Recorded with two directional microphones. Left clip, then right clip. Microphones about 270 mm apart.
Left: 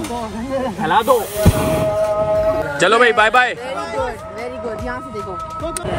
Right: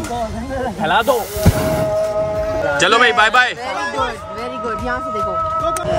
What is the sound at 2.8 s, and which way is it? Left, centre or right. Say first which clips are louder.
Speech: even; centre.